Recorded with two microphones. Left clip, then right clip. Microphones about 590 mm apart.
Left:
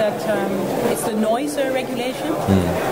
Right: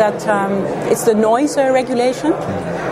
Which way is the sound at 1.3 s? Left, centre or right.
Right.